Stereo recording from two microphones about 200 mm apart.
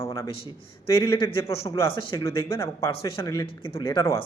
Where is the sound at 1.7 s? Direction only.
20° left (ahead or behind).